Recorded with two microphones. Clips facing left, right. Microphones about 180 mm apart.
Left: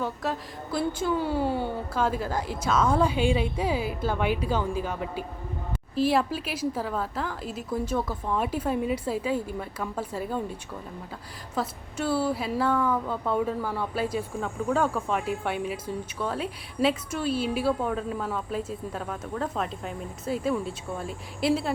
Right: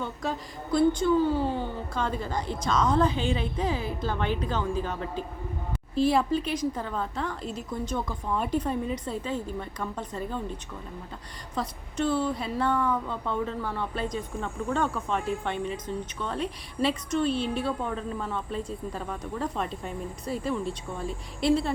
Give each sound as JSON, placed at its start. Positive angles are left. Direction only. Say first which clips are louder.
{"t": 0.0, "sound": "a woman's voice", "louder": "left 2 dB", "side_deg": 5}
{"t": 11.5, "sound": "a woman's voice", "louder": "even", "side_deg": 5}